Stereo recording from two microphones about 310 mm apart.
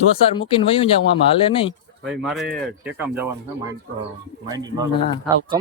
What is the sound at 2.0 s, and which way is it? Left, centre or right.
Speech, centre.